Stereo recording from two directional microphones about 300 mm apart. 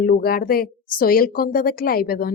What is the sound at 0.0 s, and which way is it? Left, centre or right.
Speech, left.